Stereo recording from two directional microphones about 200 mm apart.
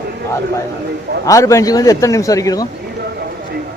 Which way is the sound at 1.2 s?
15° left (ahead or behind).